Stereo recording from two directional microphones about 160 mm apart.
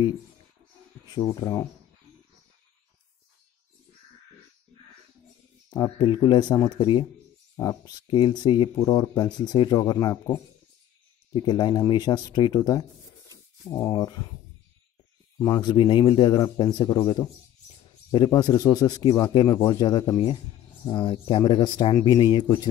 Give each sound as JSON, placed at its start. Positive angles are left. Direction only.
{"t": 1.1, "sound": "speech", "side_deg": 25}
{"t": 5.7, "sound": "speech", "side_deg": 25}
{"t": 11.3, "sound": "speech", "side_deg": 30}
{"t": 15.4, "sound": "speech", "side_deg": 25}